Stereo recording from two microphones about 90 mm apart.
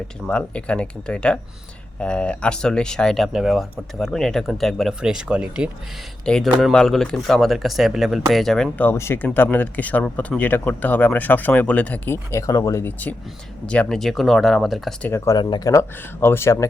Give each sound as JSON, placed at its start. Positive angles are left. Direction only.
{"t": 0.3, "sound": "speech", "side_deg": 10}
{"t": 4.9, "sound": "speech", "side_deg": -10}
{"t": 6.2, "sound": "speech", "side_deg": 5}
{"t": 8.8, "sound": "speech", "side_deg": 25}
{"t": 12.1, "sound": "speech", "side_deg": 35}
{"t": 12.8, "sound": "speech", "side_deg": 20}
{"t": 15.1, "sound": "speech", "side_deg": 35}
{"t": 15.4, "sound": "speech", "side_deg": 55}
{"t": 15.7, "sound": "speech", "side_deg": 30}